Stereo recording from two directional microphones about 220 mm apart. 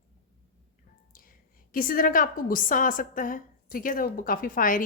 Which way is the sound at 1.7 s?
40° left (ahead or behind).